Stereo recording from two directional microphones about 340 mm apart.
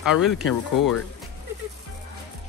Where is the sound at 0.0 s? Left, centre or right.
Centre.